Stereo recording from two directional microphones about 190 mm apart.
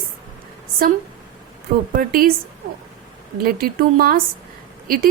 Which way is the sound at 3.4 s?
50° right (ahead or behind).